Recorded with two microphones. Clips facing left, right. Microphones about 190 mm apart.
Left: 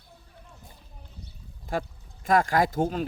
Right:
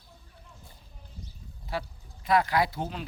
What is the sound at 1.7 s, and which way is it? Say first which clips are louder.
Speech: left 4 dB; 50° left (ahead or behind).